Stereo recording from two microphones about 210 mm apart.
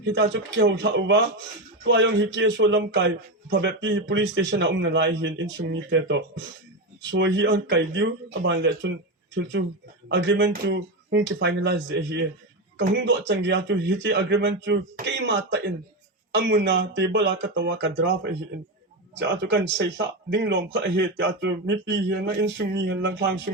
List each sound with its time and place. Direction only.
0.0 s a man's voice: 60° right (ahead or behind)